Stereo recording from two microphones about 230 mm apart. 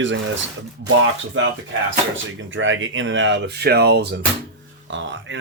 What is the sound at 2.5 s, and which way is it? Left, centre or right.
Speech, right.